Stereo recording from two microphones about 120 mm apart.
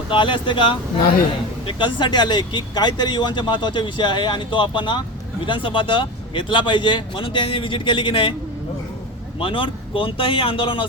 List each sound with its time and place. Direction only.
0.1 s speech: 45° left (ahead or behind)
9.4 s speech: 45° left (ahead or behind)